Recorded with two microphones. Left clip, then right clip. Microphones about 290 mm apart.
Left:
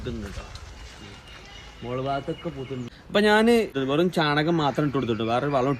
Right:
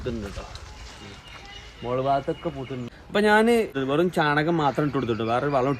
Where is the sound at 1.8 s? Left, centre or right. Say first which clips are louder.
Right 5 dB; right.